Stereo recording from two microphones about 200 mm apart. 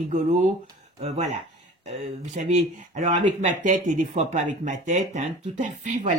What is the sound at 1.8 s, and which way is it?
Speech, 35° right (ahead or behind).